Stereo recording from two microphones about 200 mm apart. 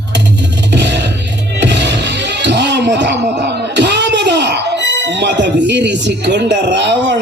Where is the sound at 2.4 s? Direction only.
60° right (ahead or behind).